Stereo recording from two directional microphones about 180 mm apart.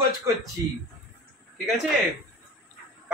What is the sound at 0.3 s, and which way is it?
Speech, 15° right (ahead or behind).